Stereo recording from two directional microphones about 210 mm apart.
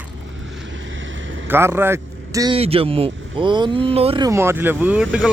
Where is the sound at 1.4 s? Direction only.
10° right (ahead or behind).